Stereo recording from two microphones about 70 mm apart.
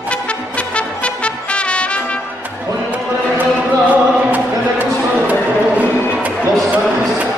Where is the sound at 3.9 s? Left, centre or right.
Right.